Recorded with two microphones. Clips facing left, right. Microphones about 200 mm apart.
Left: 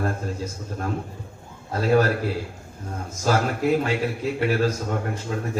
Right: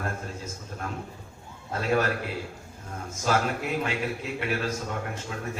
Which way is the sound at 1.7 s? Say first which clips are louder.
Left 6 dB; 35° left (ahead or behind).